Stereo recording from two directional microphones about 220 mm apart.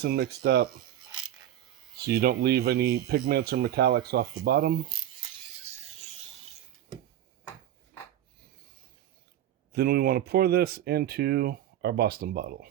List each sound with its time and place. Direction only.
0.0 s speech: 45° right (ahead or behind)
2.0 s speech: 45° right (ahead or behind)
9.7 s speech: 45° right (ahead or behind)